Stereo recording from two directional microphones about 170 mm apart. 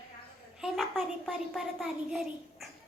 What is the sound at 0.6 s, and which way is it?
A child's voice, centre (ahead or behind).